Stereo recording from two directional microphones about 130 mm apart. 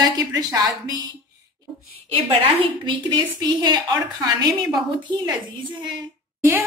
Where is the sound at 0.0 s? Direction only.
30° right (ahead or behind).